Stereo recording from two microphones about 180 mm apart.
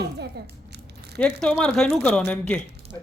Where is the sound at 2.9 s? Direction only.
20° left (ahead or behind).